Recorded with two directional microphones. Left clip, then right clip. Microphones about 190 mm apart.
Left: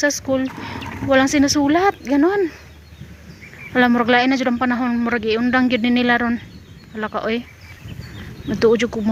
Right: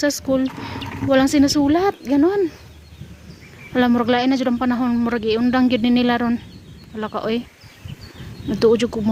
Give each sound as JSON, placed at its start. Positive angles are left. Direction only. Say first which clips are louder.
{"t": 0.0, "sound": "speech", "louder": "left 1 dB", "side_deg": -40}
{"t": 0.8, "sound": "a sound", "louder": "right 1 dB", "side_deg": -5}
{"t": 1.1, "sound": "speech", "louder": "left 1 dB", "side_deg": -35}
{"t": 3.8, "sound": "speech", "louder": "left 3 dB", "side_deg": -25}
{"t": 8.5, "sound": "speech", "louder": "even", "side_deg": -30}